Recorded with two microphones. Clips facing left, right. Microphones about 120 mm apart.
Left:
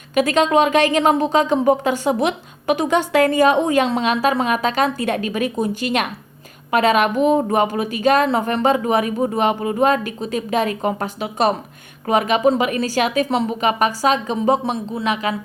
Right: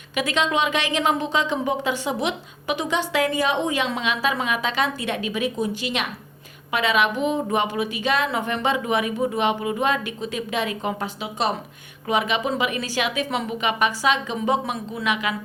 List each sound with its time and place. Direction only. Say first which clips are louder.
0.1 s a woman's voice: left 7 dB; 45° left (ahead or behind)